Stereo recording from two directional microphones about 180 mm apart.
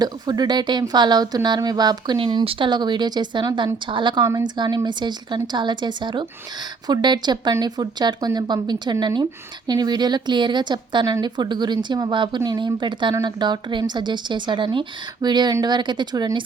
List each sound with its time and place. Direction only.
0.0 s a woman's voice: 20° right (ahead or behind)